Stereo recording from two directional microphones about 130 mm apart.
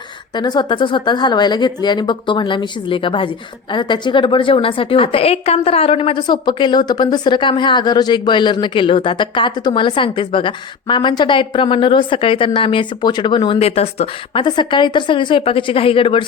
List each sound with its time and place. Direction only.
0.3 s a woman's voice: 35° left (ahead or behind)
13.6 s speech: 50° left (ahead or behind)
14.4 s a woman's voice: 35° left (ahead or behind)